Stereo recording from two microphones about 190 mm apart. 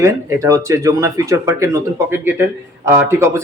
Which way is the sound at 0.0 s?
15° right (ahead or behind).